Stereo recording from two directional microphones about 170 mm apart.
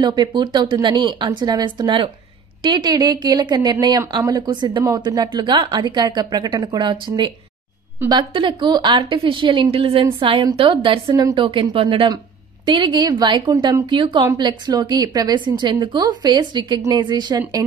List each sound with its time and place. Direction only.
0.0 s a woman's voice: 25° right (ahead or behind)